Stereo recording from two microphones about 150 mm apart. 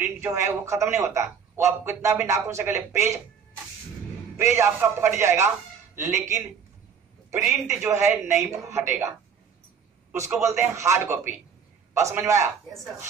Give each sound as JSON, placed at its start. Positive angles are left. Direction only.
{"t": 0.0, "sound": "speech", "side_deg": -15}
{"t": 4.4, "sound": "speech", "side_deg": -20}
{"t": 7.6, "sound": "a woman's voice", "side_deg": -20}
{"t": 10.4, "sound": "a woman's voice", "side_deg": -15}